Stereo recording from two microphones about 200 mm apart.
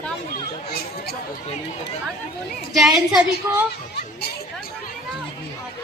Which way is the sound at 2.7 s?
Centre (ahead or behind).